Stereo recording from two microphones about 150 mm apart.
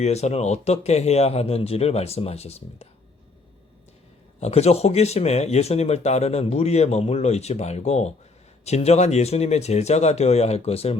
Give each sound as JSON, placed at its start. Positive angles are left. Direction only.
{"t": 0.0, "sound": "speech", "side_deg": 45}
{"t": 4.4, "sound": "speech", "side_deg": 45}